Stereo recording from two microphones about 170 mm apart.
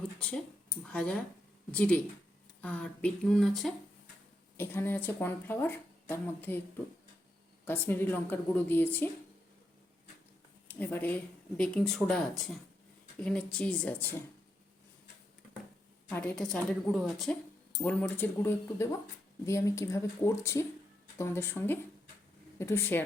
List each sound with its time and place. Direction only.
0.2 s speech: 5° left (ahead or behind)
4.5 s speech: 15° left (ahead or behind)
7.6 s speech: 10° left (ahead or behind)
10.7 s speech: 10° left (ahead or behind)
16.0 s speech: 10° left (ahead or behind)